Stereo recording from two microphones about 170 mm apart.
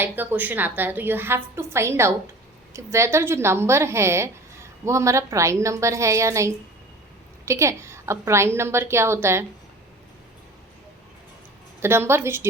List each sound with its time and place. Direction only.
0.0 s a woman's voice: 10° right (ahead or behind)
11.8 s a woman's voice: 15° right (ahead or behind)